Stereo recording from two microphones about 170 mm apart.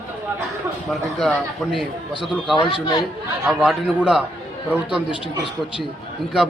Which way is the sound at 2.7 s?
25° left (ahead or behind).